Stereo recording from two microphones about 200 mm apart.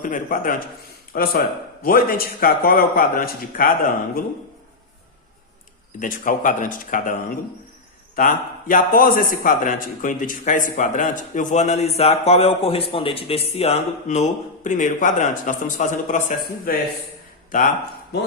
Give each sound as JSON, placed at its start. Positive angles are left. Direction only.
{"t": 0.0, "sound": "speech", "side_deg": 45}
{"t": 6.0, "sound": "a man's voice", "side_deg": 40}